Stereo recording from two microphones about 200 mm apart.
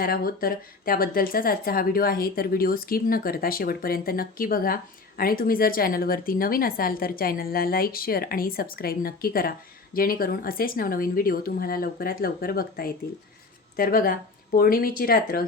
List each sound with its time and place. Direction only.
0.0 s speech: 45° left (ahead or behind)